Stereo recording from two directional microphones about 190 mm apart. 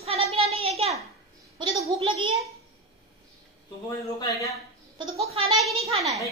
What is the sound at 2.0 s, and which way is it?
Speech, 30° right (ahead or behind).